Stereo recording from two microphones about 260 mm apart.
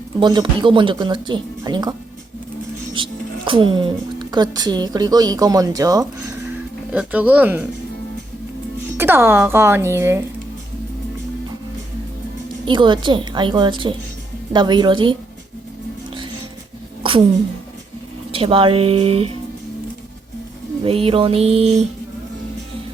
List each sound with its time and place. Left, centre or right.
0.2 s speech: centre
9.0 s speech: centre
12.6 s speech: centre
17.0 s a sound: centre
18.3 s speech: right
20.8 s speech: right